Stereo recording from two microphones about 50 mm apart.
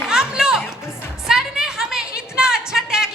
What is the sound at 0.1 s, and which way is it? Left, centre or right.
Music, centre.